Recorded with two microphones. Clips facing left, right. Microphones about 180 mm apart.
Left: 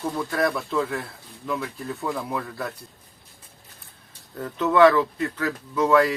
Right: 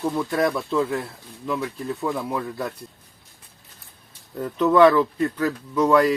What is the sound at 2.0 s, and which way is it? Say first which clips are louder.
Speech: right 2 dB; centre (ahead or behind).